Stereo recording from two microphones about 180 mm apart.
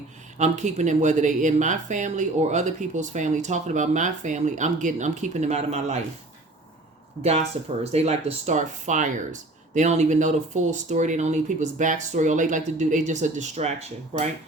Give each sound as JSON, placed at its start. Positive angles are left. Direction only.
{"t": 0.3, "sound": "speech", "side_deg": -40}
{"t": 7.2, "sound": "speech", "side_deg": -35}